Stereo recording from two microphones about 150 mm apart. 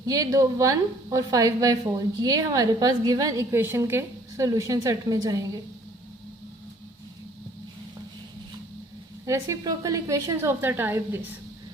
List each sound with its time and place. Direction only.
0.0 s a woman's voice: 25° right (ahead or behind)
9.2 s a woman's voice: 20° right (ahead or behind)